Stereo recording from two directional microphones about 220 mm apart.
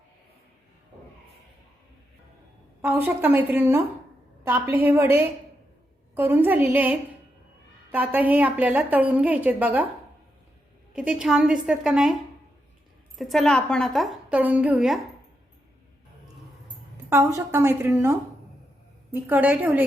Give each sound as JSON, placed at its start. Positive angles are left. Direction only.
{"t": 2.8, "sound": "a woman's voice", "side_deg": -10}
{"t": 10.9, "sound": "a woman's voice", "side_deg": -5}
{"t": 13.1, "sound": "a woman's voice", "side_deg": 0}
{"t": 17.1, "sound": "a woman's voice", "side_deg": -15}